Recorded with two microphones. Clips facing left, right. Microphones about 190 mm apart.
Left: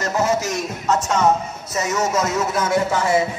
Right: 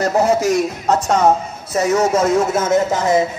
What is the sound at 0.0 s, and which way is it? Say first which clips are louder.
A man's voice: right 5 dB; 35° right (ahead or behind).